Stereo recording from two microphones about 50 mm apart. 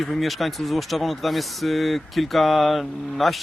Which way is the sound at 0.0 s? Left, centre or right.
Centre.